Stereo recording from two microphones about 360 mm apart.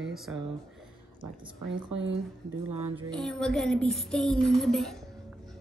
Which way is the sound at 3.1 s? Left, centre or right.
Centre.